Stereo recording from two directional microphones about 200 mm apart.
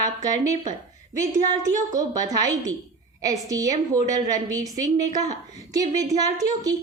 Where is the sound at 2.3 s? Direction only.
20° right (ahead or behind).